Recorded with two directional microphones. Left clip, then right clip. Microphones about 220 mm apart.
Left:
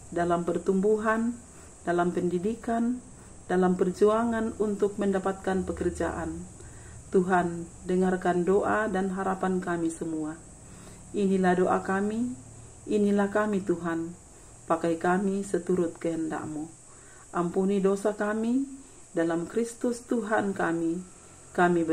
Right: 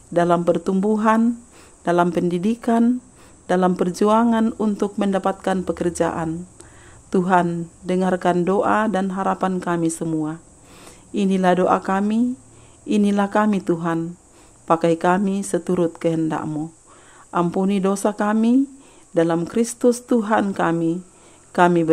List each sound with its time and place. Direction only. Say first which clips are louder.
0.1 s speech: right 10 dB; 55° right (ahead or behind)